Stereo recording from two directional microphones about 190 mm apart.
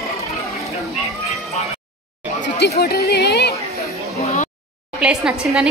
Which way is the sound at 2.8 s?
55° left (ahead or behind).